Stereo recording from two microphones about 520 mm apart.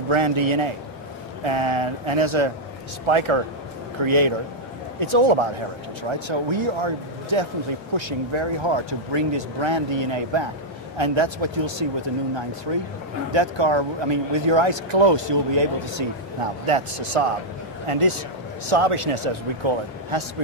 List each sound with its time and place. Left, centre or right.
0.1 s speech: right
16.6 s speech: right